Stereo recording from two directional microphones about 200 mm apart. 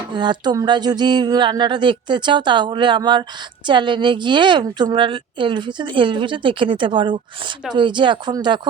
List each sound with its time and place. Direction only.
0.2 s a woman's voice: 20° right (ahead or behind)